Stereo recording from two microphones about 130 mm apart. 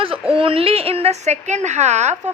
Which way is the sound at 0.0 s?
45° right (ahead or behind).